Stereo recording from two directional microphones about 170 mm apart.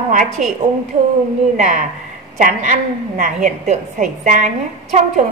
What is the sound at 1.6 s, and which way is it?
A woman's voice, 50° right (ahead or behind).